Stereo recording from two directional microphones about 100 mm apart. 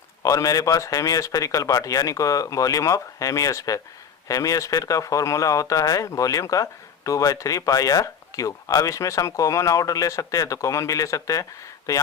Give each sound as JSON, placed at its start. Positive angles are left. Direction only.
{"t": 0.2, "sound": "speech", "side_deg": 35}